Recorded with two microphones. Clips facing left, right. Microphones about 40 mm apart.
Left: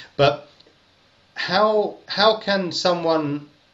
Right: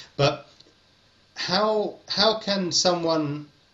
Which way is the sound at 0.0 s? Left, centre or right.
Left.